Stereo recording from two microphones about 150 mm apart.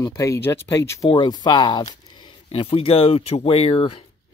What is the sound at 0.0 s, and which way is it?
Speech, 20° left (ahead or behind).